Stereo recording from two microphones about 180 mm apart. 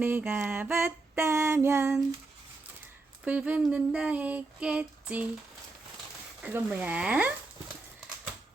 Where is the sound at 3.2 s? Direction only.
10° right (ahead or behind).